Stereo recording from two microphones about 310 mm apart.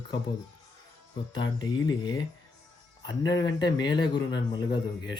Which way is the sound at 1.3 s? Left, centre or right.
Centre.